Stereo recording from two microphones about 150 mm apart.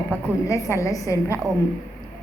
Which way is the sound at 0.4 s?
20° left (ahead or behind).